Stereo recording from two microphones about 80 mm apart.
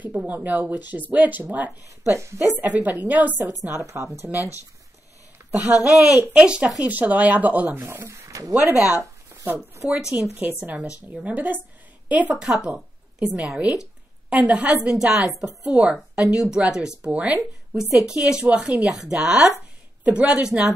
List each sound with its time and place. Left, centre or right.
0.3 s a woman's voice: right
2.1 s a woman's voice: right
3.6 s speech: right
5.6 s a woman's voice: right
7.8 s speech: right
8.7 s speech: left
9.8 s a woman's voice: centre
11.1 s a woman's voice: centre